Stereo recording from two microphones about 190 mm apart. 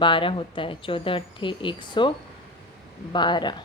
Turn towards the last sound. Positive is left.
turn(degrees=25)  # may be behind; listen again after turning